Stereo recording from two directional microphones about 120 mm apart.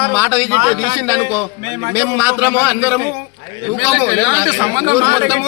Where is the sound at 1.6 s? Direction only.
75° right (ahead or behind).